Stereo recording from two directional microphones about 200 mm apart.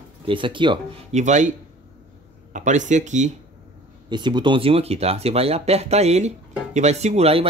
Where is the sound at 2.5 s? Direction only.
40° right (ahead or behind).